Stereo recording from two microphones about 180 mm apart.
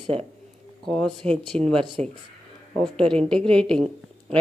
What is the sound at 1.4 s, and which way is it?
Speech, 25° right (ahead or behind).